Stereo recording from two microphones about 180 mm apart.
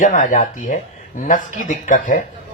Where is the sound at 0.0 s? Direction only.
45° left (ahead or behind).